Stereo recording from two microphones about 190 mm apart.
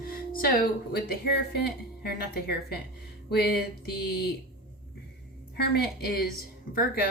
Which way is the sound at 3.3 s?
60° left (ahead or behind).